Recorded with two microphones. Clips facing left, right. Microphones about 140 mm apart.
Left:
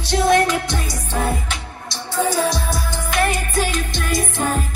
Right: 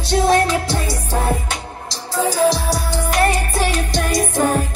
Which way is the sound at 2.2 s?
35° right (ahead or behind).